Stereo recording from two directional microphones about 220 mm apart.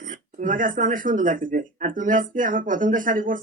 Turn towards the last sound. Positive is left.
turn(degrees=-40)  # may be behind; listen again after turning